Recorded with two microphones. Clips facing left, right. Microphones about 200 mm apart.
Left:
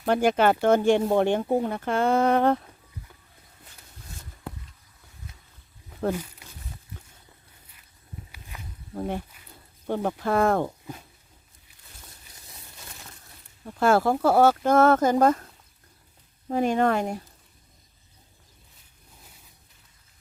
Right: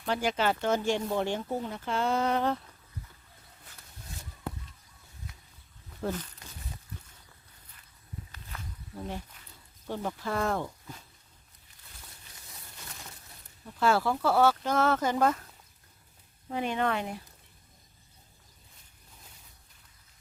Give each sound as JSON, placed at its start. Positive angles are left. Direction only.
{"t": 0.0, "sound": "speech", "side_deg": 55}
{"t": 8.3, "sound": "walk", "side_deg": 10}
{"t": 9.0, "sound": "speech", "side_deg": 55}
{"t": 13.7, "sound": "speech", "side_deg": 50}
{"t": 16.5, "sound": "speech", "side_deg": 45}